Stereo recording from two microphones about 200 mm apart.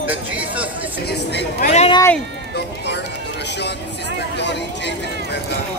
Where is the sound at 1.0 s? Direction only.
60° left (ahead or behind).